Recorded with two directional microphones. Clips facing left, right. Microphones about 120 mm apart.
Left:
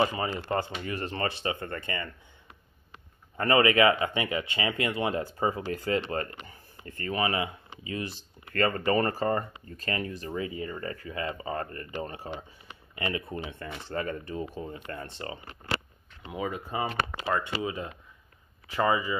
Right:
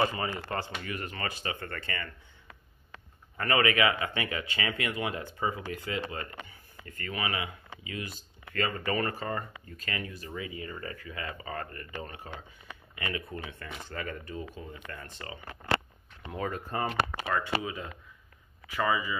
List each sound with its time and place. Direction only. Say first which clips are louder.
0.1 s speech: left 4 dB; 25° left (ahead or behind)
3.3 s speech: left 4 dB; 30° left (ahead or behind)
6.1 s speech: left 6 dB; 45° left (ahead or behind)
6.8 s speech: left 6 dB; 30° left (ahead or behind)
8.5 s speech: left 5 dB; 45° left (ahead or behind)
8.8 s speech: left 6 dB; 35° left (ahead or behind)
16.3 s speech: left 1 dB; 10° left (ahead or behind)
17.2 s speech: left 1 dB; 25° left (ahead or behind)